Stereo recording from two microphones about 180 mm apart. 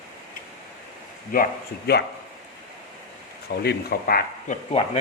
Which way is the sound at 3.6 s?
55° left (ahead or behind).